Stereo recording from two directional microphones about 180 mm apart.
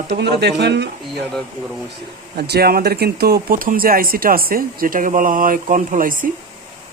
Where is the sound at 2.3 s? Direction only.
60° right (ahead or behind).